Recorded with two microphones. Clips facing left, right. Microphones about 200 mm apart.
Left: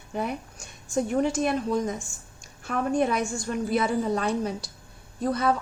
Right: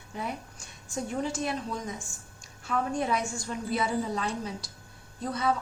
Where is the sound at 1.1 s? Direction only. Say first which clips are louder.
Left 6 dB; 55° left (ahead or behind).